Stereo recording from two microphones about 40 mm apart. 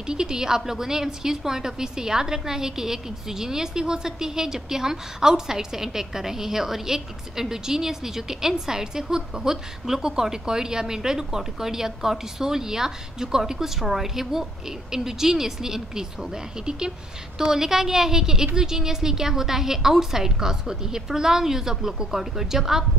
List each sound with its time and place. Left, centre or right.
0.0 s a woman's voice: centre